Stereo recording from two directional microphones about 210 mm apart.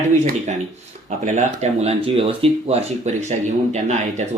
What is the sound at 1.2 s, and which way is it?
Speech, 35° right (ahead or behind).